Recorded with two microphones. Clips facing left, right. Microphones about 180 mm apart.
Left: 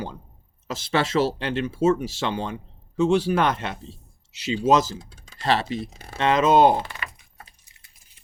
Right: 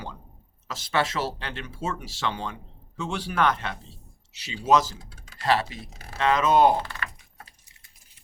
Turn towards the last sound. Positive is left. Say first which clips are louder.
# left 2 dB
turn(degrees=15)  # may be behind; listen again after turning